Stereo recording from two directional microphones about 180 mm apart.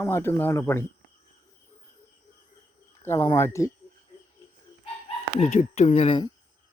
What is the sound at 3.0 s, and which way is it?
Speech, 15° left (ahead or behind).